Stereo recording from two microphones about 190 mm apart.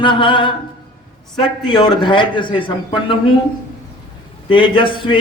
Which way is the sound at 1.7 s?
25° left (ahead or behind).